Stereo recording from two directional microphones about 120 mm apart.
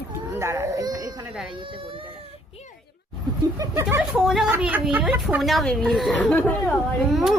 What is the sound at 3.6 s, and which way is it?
Speech, 30° right (ahead or behind).